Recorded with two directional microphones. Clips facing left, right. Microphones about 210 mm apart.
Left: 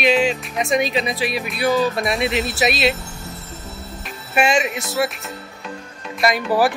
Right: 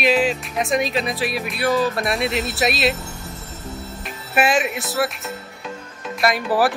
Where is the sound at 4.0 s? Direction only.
5° right (ahead or behind).